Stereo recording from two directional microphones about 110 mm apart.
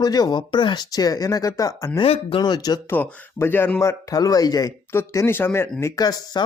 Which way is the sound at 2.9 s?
20° left (ahead or behind).